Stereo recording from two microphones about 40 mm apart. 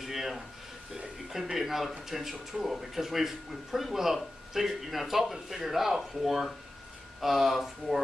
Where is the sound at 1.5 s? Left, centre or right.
Centre.